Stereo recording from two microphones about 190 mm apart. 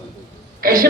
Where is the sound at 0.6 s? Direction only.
50° right (ahead or behind).